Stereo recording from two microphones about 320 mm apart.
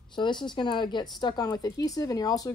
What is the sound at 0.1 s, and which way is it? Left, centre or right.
Speech, centre.